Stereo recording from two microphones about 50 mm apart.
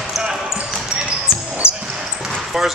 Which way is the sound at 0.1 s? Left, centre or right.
Centre.